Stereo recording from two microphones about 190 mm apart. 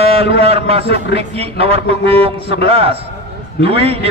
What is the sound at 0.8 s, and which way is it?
Speech, 65° left (ahead or behind).